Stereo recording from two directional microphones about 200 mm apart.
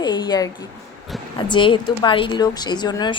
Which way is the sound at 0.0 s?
20° left (ahead or behind).